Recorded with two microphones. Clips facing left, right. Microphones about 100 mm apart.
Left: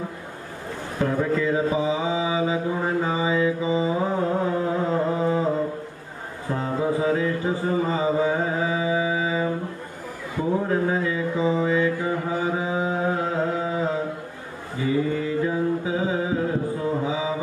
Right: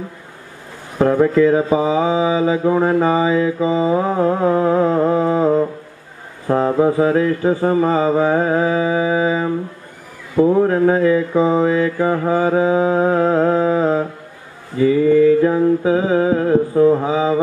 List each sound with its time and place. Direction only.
0.9 s mantra: 60° right (ahead or behind)
6.5 s mantra: 65° right (ahead or behind)
10.6 s mantra: 60° right (ahead or behind)
15.0 s mantra: 70° right (ahead or behind)